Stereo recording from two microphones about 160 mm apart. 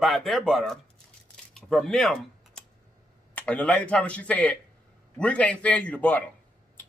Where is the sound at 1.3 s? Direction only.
5° left (ahead or behind).